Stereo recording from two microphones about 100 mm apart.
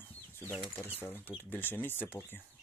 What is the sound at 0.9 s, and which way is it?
Speech, 20° left (ahead or behind).